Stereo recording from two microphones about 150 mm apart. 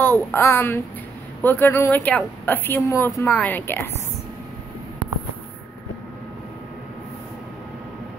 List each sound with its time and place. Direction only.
0.0 s speech: 15° left (ahead or behind)